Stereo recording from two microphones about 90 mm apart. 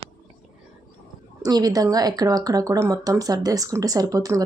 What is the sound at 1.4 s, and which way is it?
Speech, 45° right (ahead or behind).